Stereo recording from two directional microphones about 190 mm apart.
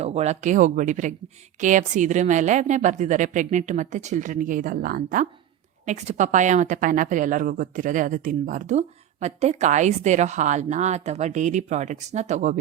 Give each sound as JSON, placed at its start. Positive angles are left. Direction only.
{"t": 0.0, "sound": "a woman's voice", "side_deg": -35}